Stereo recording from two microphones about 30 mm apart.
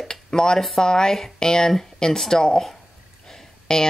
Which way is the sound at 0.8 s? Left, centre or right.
Left.